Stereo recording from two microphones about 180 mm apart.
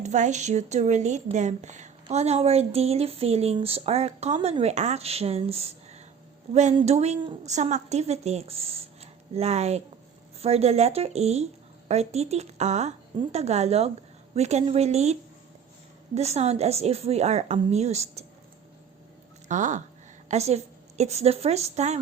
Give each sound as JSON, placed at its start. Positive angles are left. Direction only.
{"t": 0.0, "sound": "speech", "side_deg": -40}
{"t": 19.5, "sound": "a woman's voice", "side_deg": -45}